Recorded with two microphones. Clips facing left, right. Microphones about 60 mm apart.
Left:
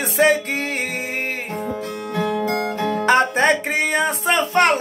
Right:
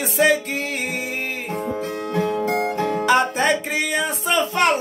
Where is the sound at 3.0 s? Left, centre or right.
Left.